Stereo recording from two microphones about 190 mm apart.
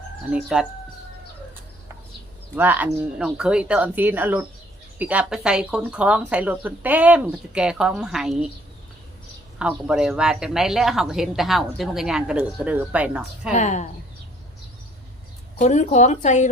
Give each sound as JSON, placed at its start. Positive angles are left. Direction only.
{"t": 0.3, "sound": "speech", "side_deg": -5}
{"t": 2.6, "sound": "speech", "side_deg": -10}
{"t": 9.6, "sound": "speech", "side_deg": -5}
{"t": 13.5, "sound": "speech", "side_deg": 40}
{"t": 15.5, "sound": "speech", "side_deg": 40}